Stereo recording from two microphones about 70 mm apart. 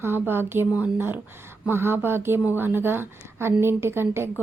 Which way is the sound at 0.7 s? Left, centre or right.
Right.